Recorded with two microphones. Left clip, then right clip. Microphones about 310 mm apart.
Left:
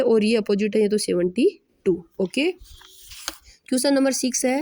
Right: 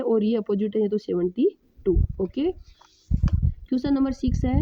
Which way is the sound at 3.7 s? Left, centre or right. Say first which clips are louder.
Left 5 dB; right.